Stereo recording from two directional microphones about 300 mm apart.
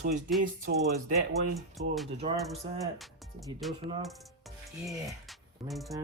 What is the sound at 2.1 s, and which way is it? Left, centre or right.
Speech, centre.